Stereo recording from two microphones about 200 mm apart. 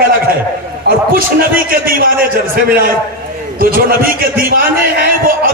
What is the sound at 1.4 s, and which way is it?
A man's voice, 45° right (ahead or behind).